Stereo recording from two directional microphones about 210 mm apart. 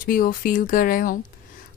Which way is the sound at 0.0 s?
45° left (ahead or behind).